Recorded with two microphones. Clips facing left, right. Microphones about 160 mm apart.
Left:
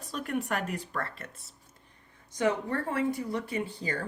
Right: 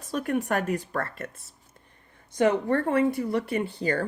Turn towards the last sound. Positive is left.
turn(degrees=-65)  # may be behind; listen again after turning